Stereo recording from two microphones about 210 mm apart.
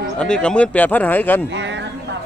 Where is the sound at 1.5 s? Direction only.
60° right (ahead or behind).